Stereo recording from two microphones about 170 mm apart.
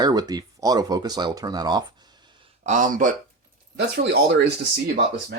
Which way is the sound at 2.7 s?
50° right (ahead or behind).